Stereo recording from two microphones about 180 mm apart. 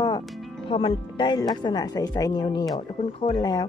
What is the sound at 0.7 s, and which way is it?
Speech, 30° left (ahead or behind).